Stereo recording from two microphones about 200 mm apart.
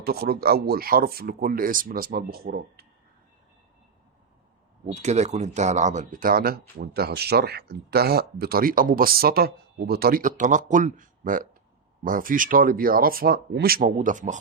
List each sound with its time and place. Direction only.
0.0 s speech: 50° right (ahead or behind)
4.9 s speech: 35° right (ahead or behind)